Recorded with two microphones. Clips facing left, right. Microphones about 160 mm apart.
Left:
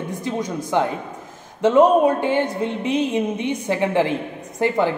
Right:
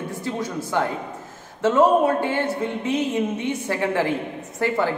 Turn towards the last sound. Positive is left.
turn(degrees=20)  # may be behind; listen again after turning